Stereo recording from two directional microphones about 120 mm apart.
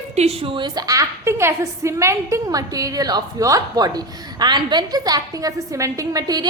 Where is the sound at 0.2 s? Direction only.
55° right (ahead or behind).